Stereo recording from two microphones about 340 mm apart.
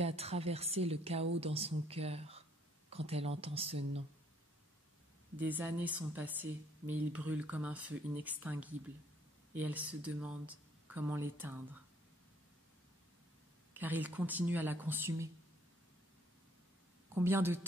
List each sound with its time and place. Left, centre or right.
0.0 s a woman's voice: centre
5.4 s speech: centre
13.7 s speech: centre
17.1 s a woman's voice: centre